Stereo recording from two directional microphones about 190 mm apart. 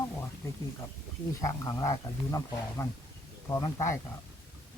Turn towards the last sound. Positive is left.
turn(degrees=15)  # may be behind; listen again after turning